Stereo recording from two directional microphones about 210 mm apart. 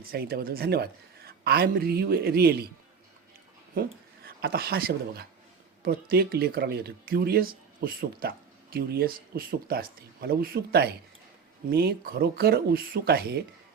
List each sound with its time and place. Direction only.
0.1 s speech: 45° right (ahead or behind)
3.8 s speech: 45° right (ahead or behind)